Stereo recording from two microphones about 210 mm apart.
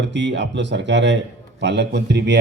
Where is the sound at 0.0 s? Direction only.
55° right (ahead or behind).